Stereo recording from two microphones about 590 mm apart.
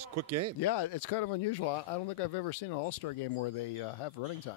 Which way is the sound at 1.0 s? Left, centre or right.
Left.